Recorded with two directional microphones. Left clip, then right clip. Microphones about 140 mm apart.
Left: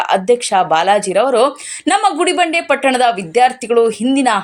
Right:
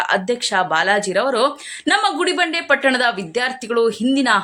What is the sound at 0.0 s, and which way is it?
Speech, 15° left (ahead or behind).